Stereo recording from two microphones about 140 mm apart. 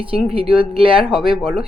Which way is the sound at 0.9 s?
5° right (ahead or behind).